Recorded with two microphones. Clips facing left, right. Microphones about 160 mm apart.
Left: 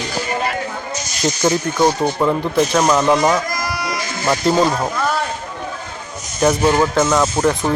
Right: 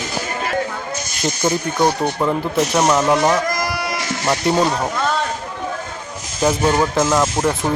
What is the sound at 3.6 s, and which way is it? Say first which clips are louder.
Sheep: even; 55° right (ahead or behind).